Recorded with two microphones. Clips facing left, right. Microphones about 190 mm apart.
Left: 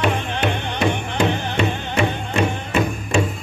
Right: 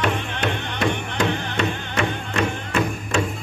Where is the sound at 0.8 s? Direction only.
25° left (ahead or behind).